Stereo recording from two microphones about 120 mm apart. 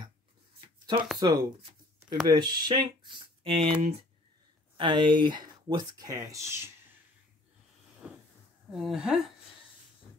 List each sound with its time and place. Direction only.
0.6 s writing: 45° right (ahead or behind)
1.2 s speech: 35° right (ahead or behind)
4.7 s speech: 40° right (ahead or behind); by 6.7 s 20° right (ahead or behind)
8.0 s a sound: 10° right (ahead or behind)
8.7 s a woman's voice: 5° right (ahead or behind)